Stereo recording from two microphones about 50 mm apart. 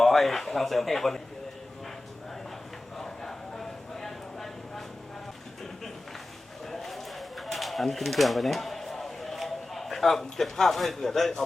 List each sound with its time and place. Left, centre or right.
0.0 s speech: centre
3.0 s a sound: centre
6.7 s bird: centre